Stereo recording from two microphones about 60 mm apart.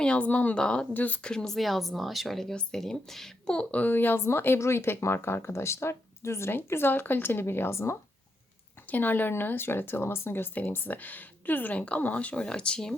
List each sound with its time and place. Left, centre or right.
0.0 s a woman's voice: left
0.9 s speech: left
1.2 s a woman's voice: centre
1.5 s speech: centre; by 7.9 s left
8.9 s speech: left; by 12.9 s centre